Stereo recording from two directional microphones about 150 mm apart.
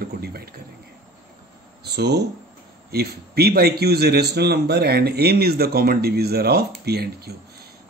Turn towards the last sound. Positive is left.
turn(degrees=-90)